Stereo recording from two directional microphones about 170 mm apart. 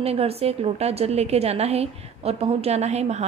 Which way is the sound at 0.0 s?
35° right (ahead or behind).